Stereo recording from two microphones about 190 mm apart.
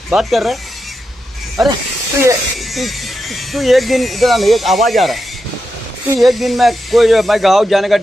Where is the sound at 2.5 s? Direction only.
Centre (ahead or behind).